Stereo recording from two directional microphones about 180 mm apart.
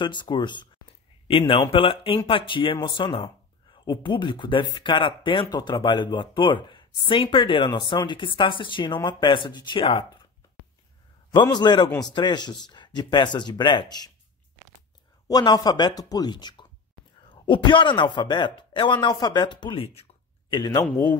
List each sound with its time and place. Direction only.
0.0 s speech: 25° left (ahead or behind)
11.3 s speech: 25° left (ahead or behind)
15.2 s speech: 20° left (ahead or behind)